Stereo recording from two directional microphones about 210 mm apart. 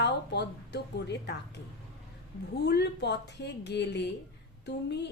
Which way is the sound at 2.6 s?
55° left (ahead or behind).